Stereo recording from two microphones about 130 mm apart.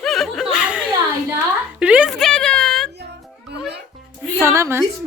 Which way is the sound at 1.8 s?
10° right (ahead or behind).